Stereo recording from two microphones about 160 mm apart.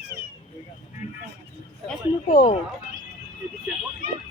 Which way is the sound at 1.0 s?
50° left (ahead or behind).